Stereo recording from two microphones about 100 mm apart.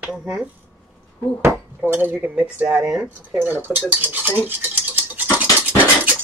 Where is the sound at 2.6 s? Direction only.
5° right (ahead or behind).